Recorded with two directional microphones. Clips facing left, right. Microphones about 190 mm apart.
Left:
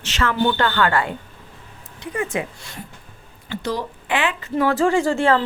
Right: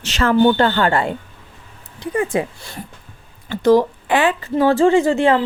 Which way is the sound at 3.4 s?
45° right (ahead or behind).